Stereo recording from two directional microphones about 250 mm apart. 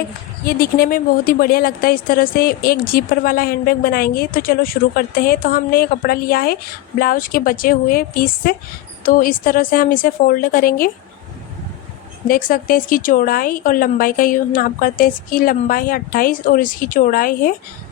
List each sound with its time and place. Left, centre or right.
0.4 s a woman's voice: left
12.3 s a woman's voice: left